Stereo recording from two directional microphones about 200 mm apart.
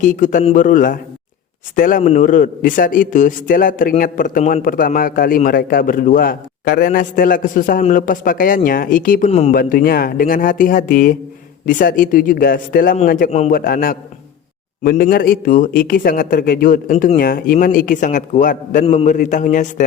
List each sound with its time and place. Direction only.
0.0 s a man's voice: 40° left (ahead or behind)
9.6 s a man's voice: 45° left (ahead or behind)